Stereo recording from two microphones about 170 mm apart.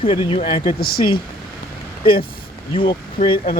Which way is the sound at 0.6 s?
60° left (ahead or behind).